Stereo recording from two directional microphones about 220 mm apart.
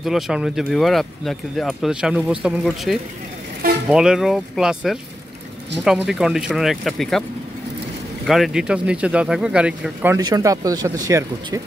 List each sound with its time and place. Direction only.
0.0 s speech: centre (ahead or behind)
8.3 s speech: centre (ahead or behind)
10.1 s speech: 15° right (ahead or behind)